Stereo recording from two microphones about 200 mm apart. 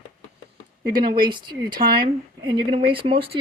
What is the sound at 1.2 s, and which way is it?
Speech, 20° right (ahead or behind).